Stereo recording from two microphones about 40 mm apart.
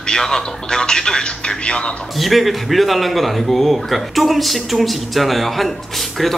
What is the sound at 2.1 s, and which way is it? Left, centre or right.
Speech, centre.